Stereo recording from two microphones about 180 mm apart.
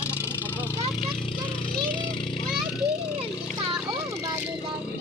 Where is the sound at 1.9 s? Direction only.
25° left (ahead or behind).